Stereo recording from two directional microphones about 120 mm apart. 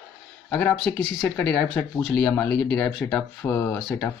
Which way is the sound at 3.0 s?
15° left (ahead or behind).